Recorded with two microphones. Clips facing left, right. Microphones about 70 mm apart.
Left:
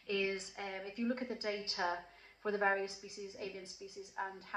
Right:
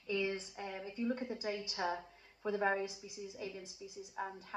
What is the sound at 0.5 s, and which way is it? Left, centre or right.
A woman's voice, left.